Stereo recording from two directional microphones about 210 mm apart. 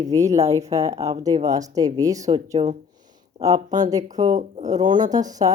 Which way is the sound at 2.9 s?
20° right (ahead or behind).